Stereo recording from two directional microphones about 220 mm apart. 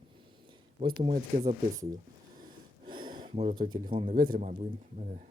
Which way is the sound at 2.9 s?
20° right (ahead or behind).